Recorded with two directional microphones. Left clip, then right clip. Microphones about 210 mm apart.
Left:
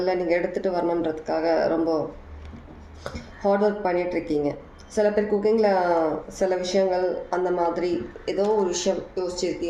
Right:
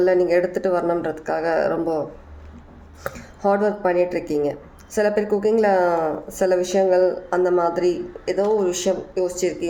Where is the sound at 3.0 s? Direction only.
35° right (ahead or behind).